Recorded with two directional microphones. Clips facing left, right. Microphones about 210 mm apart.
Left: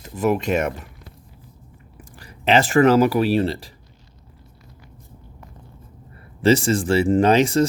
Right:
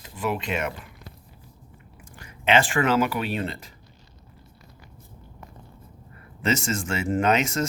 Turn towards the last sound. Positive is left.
turn(degrees=35)  # may be behind; listen again after turning